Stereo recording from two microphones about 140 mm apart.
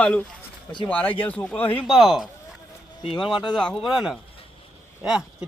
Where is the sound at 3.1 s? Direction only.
35° left (ahead or behind).